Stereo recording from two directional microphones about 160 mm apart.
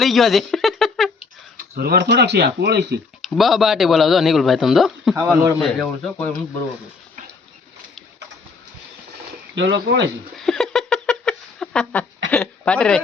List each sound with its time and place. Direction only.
0.0 s a sound: centre (ahead or behind)
1.5 s speech: 75° right (ahead or behind); by 3.0 s 90° right
3.2 s speech: centre (ahead or behind)
5.1 s a man's voice: 15° right (ahead or behind)
5.6 s speech: 5° left (ahead or behind)
9.6 s speech: 90° right
10.3 s a sound: 5° left (ahead or behind)